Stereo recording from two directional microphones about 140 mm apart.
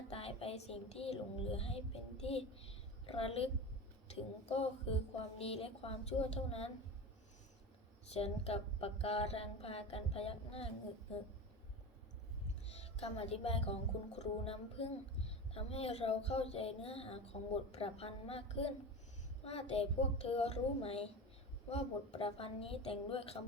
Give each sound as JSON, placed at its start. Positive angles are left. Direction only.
{"t": 0.2, "sound": "child singing", "side_deg": 45}
{"t": 4.4, "sound": "speech", "side_deg": 45}
{"t": 8.1, "sound": "speech", "side_deg": 45}
{"t": 13.0, "sound": "speech", "side_deg": 45}